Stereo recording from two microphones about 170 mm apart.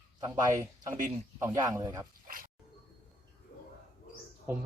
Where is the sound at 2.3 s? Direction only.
55° right (ahead or behind).